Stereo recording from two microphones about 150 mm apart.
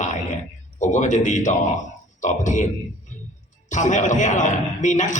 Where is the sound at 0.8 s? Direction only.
55° left (ahead or behind).